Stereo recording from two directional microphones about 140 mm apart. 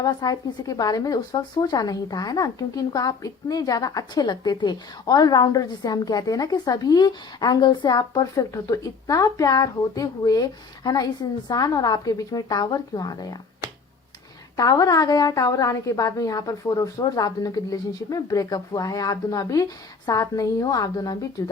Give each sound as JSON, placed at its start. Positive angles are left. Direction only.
{"t": 0.0, "sound": "speech", "side_deg": 25}
{"t": 14.5, "sound": "speech", "side_deg": 25}